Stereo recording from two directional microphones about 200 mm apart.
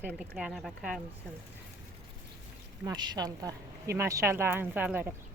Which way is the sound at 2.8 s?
20° right (ahead or behind).